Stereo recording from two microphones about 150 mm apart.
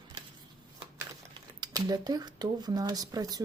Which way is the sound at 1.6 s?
25° right (ahead or behind).